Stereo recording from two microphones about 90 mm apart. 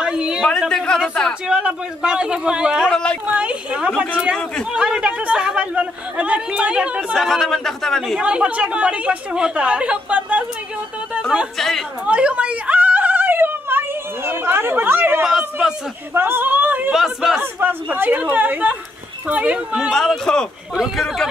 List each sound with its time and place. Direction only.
0.0 s a sound: 10° right (ahead or behind)
0.5 s a sound: 5° left (ahead or behind)
1.5 s speech: 10° right (ahead or behind)
2.9 s speech: 10° left (ahead or behind)
3.3 s speech: 15° right (ahead or behind)
7.2 s speech: centre (ahead or behind)
8.2 s speech: 15° right (ahead or behind)
11.5 s speech: 5° left (ahead or behind)
12.1 s a sound: 10° right (ahead or behind)
15.2 s speech: 5° right (ahead or behind)
16.1 s a sound: 25° right (ahead or behind)
16.9 s speech: 5° right (ahead or behind)
17.4 s speech: 20° right (ahead or behind)
19.9 s speech: 5° left (ahead or behind)